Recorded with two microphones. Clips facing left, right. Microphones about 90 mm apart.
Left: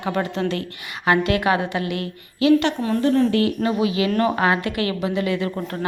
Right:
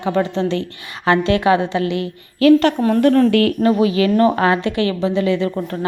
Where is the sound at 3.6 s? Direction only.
40° right (ahead or behind).